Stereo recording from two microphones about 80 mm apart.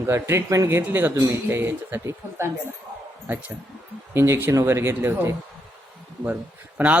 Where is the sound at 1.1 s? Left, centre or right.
Right.